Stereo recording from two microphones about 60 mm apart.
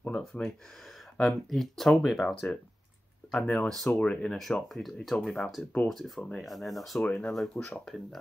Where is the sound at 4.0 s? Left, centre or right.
Centre.